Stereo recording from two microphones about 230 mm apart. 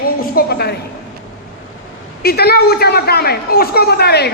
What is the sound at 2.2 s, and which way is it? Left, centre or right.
A man's voice, left.